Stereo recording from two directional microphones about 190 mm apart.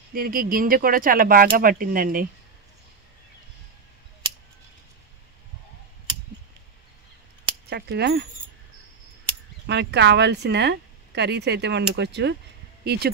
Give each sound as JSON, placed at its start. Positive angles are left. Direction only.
{"t": 0.1, "sound": "speech", "side_deg": -50}
{"t": 7.7, "sound": "speech", "side_deg": -60}
{"t": 9.7, "sound": "speech", "side_deg": -65}